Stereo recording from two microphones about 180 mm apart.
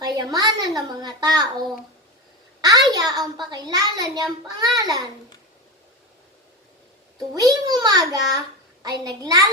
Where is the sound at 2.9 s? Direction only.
20° right (ahead or behind).